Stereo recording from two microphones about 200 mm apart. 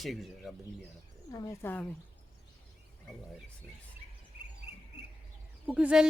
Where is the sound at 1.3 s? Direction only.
15° left (ahead or behind).